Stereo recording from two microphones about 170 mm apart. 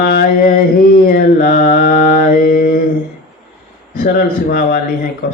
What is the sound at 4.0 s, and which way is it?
Speech, 60° left (ahead or behind).